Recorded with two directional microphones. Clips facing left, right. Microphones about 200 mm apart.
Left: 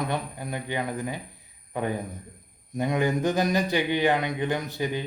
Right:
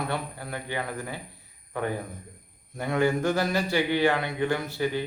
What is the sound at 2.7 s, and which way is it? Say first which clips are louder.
Speech: even; 15° left (ahead or behind).